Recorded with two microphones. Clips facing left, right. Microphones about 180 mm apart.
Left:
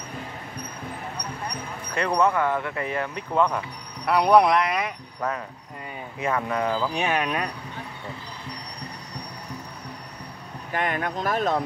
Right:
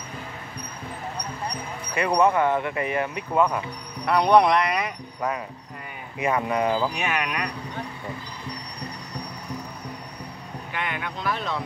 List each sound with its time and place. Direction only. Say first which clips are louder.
2.0 s speech: right 2 dB; 15° right (ahead or behind)
4.0 s speech: even; 5° left (ahead or behind)
5.2 s speech: right 1 dB; 10° right (ahead or behind)
7.0 s speech: left 3 dB; 30° left (ahead or behind)
10.7 s speech: left 5 dB; 45° left (ahead or behind)